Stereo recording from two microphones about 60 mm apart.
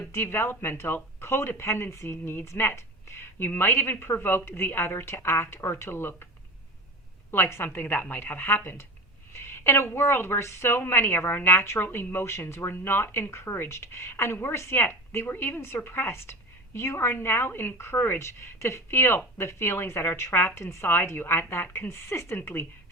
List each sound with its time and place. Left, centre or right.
0.1 s a woman's voice: left
7.3 s a woman's voice: left
9.5 s a sound: left
9.9 s a woman's voice: left